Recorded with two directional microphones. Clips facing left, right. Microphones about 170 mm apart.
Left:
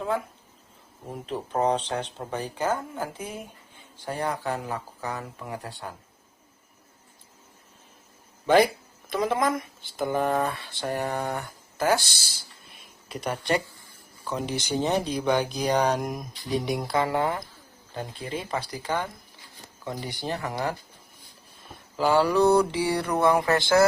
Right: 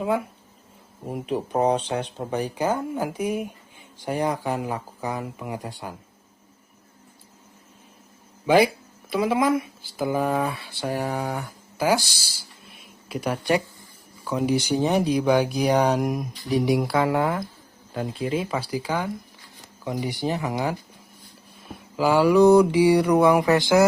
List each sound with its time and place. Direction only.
1.0 s speech: 15° right (ahead or behind)
8.4 s speech: 10° right (ahead or behind)
21.9 s speech: 10° right (ahead or behind)